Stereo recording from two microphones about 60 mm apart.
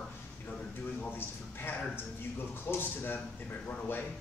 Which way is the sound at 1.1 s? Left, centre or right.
Left.